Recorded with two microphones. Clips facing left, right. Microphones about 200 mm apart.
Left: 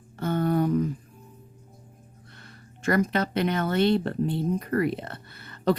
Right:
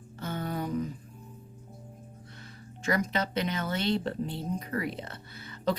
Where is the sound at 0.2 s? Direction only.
55° left (ahead or behind).